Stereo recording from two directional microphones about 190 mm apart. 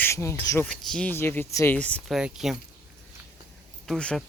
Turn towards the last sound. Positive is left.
turn(degrees=5)  # may be behind; listen again after turning